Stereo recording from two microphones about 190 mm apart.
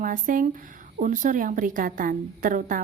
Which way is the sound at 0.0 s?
45° right (ahead or behind).